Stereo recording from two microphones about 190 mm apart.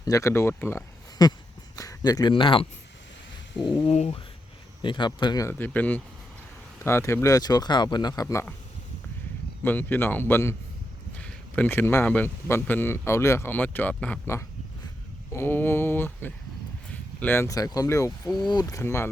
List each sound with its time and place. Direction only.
0.0 s speech: 15° left (ahead or behind)
3.9 s speech: 35° left (ahead or behind)
4.8 s speech: 25° left (ahead or behind)
9.6 s speech: 10° left (ahead or behind)